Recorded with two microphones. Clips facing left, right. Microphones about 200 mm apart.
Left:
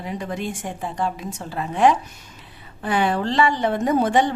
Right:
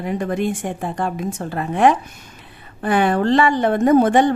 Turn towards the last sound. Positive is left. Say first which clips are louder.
# right 5 dB
turn(degrees=-55)  # may be behind; listen again after turning